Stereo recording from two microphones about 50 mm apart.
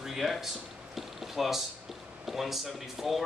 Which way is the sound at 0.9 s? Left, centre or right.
Centre.